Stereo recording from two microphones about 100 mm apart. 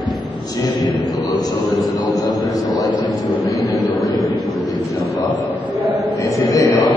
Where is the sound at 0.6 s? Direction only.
40° left (ahead or behind).